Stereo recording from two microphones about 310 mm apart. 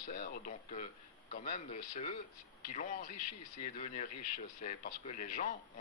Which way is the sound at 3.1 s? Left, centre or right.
Left.